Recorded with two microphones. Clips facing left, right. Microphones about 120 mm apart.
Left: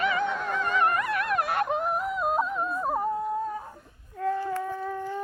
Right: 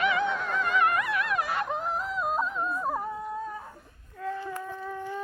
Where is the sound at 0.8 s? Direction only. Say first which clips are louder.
Left 1 dB; 40° left (ahead or behind).